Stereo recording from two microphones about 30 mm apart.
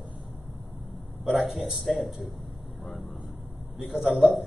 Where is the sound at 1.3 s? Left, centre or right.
Centre.